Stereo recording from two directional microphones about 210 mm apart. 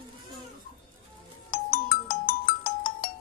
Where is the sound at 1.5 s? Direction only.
45° left (ahead or behind).